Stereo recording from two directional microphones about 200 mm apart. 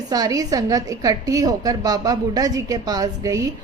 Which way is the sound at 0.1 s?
20° right (ahead or behind).